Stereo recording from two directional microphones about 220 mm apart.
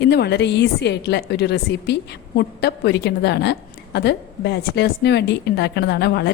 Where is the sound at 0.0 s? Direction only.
50° left (ahead or behind).